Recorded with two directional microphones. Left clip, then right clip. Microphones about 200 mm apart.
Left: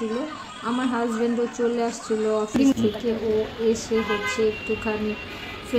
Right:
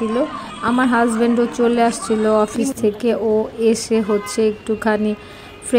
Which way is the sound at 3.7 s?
45° right (ahead or behind).